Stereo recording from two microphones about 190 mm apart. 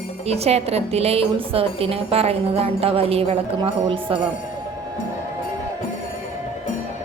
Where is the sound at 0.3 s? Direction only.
35° right (ahead or behind).